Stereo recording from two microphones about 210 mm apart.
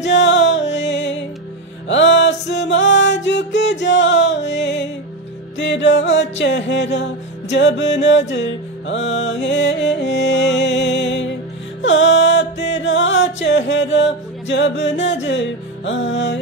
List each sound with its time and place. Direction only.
0.0 s music: 60° left (ahead or behind)